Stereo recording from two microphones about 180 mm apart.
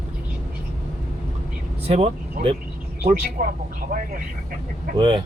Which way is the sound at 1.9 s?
35° right (ahead or behind).